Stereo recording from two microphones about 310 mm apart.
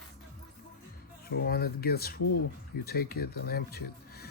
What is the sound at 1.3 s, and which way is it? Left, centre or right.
Speech, left.